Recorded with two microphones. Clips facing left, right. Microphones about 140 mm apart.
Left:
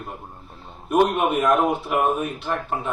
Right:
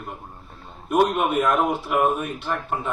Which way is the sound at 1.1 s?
Centre (ahead or behind).